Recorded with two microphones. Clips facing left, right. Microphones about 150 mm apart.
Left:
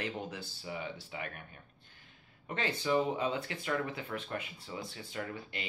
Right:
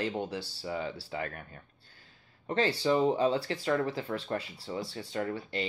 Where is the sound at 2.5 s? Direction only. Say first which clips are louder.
Right 5 dB; 35° right (ahead or behind).